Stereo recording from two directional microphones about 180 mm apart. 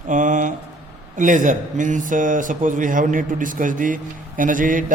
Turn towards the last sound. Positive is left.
turn(degrees=-50)  # may be behind; listen again after turning